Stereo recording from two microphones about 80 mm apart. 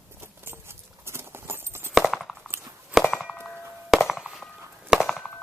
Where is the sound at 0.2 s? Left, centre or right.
Right.